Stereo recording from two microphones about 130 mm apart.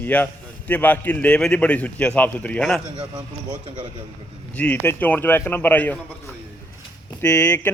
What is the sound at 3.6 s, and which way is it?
Speech, 40° right (ahead or behind).